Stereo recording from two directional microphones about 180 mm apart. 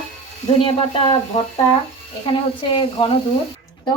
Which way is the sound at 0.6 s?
30° left (ahead or behind).